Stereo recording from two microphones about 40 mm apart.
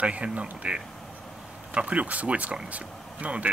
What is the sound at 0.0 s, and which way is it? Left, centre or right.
Speech, right.